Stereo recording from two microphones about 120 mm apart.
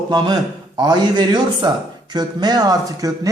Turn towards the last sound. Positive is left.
turn(degrees=-30)  # may be behind; listen again after turning